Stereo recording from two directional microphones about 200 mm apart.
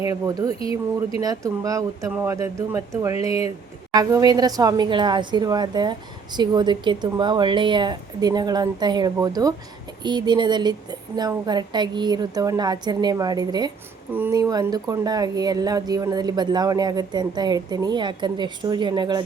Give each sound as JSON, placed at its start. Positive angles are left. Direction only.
{"t": 0.0, "sound": "speech", "side_deg": -15}
{"t": 0.6, "sound": "speech", "side_deg": 25}
{"t": 1.2, "sound": "a woman's voice", "side_deg": -20}